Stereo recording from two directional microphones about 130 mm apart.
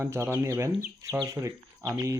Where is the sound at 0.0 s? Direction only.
20° right (ahead or behind).